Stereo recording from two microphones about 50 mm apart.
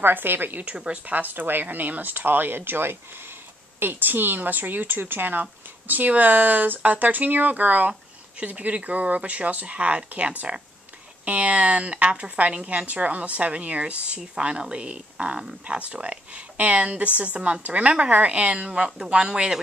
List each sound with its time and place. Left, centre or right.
0.0 s a woman's voice: right; by 19.6 s centre